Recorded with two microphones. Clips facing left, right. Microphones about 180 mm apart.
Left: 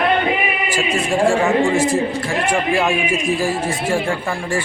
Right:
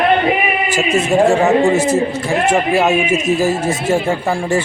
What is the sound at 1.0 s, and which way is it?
A man's voice, 20° right (ahead or behind).